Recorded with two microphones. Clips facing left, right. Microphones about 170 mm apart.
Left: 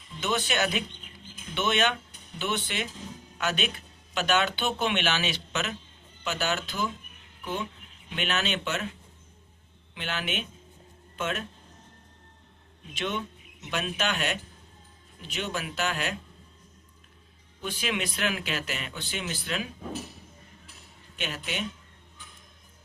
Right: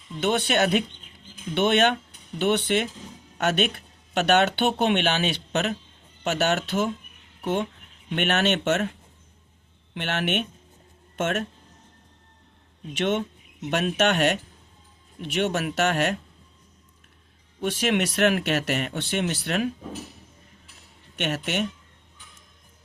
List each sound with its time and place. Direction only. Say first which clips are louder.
0.2 s speech: right 6 dB; 60° right (ahead or behind)
12.9 s speech: right 7 dB; 70° right (ahead or behind)
17.6 s speech: right 8 dB; 70° right (ahead or behind)
21.2 s speech: right 7 dB; 70° right (ahead or behind)